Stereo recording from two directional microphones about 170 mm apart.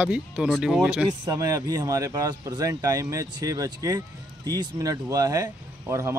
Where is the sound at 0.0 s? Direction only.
5° right (ahead or behind).